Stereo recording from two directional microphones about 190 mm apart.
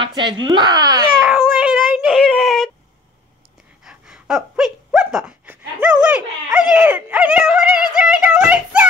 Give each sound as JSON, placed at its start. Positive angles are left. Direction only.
{"t": 0.0, "sound": "speech", "side_deg": -25}
{"t": 1.2, "sound": "a sound", "side_deg": -5}
{"t": 3.8, "sound": "dog", "side_deg": -5}